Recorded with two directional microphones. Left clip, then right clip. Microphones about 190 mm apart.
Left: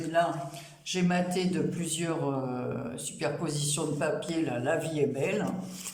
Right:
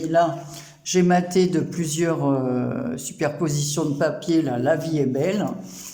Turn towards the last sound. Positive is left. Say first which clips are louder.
# right 6 dB
turn(degrees=-35)  # may be behind; listen again after turning